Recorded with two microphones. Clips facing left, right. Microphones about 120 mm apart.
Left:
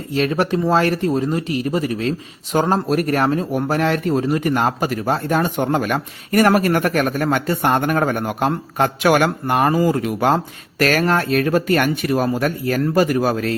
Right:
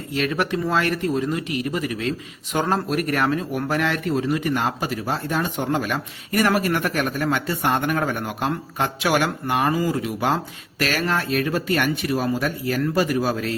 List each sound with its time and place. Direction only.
0.1 s speech: 35° left (ahead or behind); by 13.5 s 50° left (ahead or behind)